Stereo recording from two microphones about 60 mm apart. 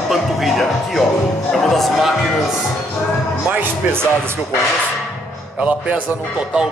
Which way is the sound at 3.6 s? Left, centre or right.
Right.